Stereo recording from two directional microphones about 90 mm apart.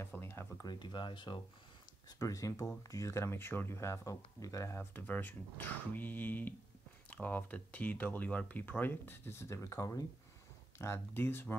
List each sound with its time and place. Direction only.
0.0 s a sound: 25° left (ahead or behind)
0.6 s speech: 55° left (ahead or behind)
2.0 s speech: 40° left (ahead or behind)
10.8 s speech: 25° left (ahead or behind)